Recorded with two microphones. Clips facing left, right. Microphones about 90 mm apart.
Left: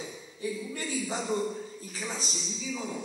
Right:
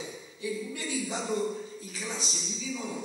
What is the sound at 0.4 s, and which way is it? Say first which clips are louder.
A man's voice: even; 40° left (ahead or behind).